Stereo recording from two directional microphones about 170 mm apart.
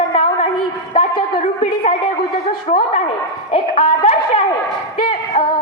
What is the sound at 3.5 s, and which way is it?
Speech, 35° left (ahead or behind).